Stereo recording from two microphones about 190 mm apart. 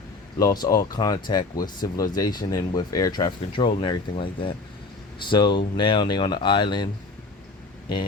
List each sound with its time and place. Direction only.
0.3 s speech: 20° left (ahead or behind)